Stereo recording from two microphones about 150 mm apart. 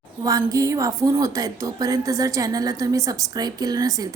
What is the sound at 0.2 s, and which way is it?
A woman's voice, 20° right (ahead or behind).